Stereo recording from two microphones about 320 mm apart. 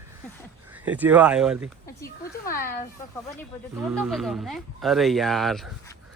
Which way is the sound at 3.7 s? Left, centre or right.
Centre.